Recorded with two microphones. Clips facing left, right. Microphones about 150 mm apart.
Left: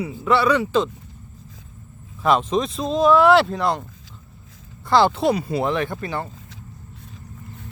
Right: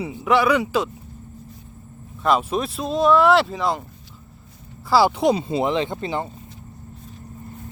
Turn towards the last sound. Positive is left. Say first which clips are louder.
# right 1 dB
turn(degrees=-20)  # may be behind; listen again after turning